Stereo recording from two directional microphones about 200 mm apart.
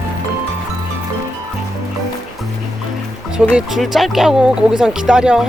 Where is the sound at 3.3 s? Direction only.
5° right (ahead or behind).